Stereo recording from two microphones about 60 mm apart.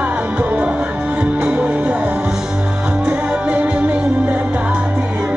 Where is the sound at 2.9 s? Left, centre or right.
Right.